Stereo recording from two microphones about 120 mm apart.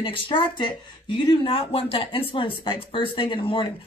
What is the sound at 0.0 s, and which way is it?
Speech, 45° left (ahead or behind).